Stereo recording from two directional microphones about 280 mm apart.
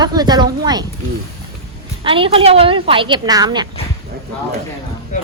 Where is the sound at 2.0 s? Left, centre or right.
Centre.